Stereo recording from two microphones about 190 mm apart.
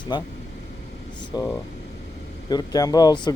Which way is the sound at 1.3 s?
20° left (ahead or behind).